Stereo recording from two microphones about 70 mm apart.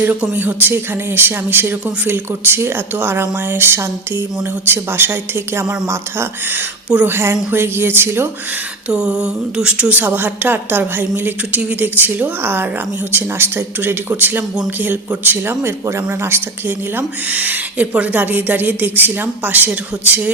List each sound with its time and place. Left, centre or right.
0.0 s speech: right
5.6 s speech: right
8.9 s a sound: centre
9.9 s speech: right